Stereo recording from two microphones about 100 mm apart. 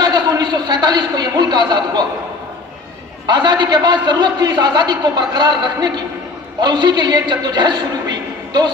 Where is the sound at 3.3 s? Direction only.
45° right (ahead or behind).